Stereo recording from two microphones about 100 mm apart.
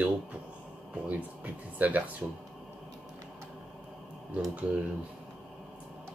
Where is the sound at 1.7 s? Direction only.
15° right (ahead or behind).